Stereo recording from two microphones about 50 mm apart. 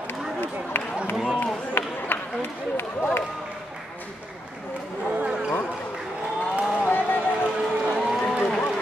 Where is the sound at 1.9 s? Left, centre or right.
Left.